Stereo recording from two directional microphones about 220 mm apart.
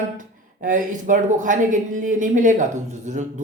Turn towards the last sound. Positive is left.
turn(degrees=-35)  # may be behind; listen again after turning